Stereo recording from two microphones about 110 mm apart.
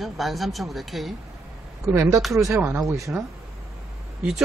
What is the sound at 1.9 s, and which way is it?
Speech, 20° right (ahead or behind).